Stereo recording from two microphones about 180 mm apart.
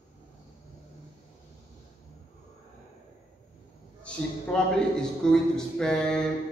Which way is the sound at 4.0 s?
5° left (ahead or behind).